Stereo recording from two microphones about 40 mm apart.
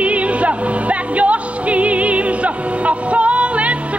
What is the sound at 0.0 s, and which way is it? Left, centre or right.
Music, right.